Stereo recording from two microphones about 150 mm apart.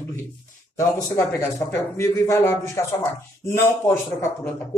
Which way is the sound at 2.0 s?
20° left (ahead or behind).